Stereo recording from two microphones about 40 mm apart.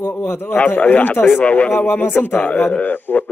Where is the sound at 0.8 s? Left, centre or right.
Left.